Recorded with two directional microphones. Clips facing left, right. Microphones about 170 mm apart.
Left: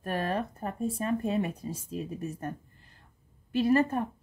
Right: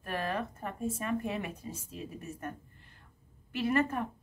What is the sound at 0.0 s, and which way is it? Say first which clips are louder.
A woman's voice: left 4 dB; 40° left (ahead or behind).